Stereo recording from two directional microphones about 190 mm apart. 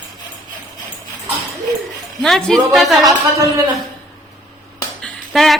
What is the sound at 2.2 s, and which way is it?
Speech, centre (ahead or behind).